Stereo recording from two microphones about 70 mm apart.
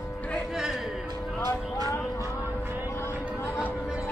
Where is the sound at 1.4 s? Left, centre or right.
Right.